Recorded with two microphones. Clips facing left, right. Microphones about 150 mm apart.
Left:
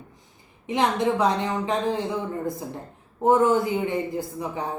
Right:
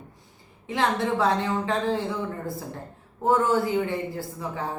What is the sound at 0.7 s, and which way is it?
Speech, 20° left (ahead or behind).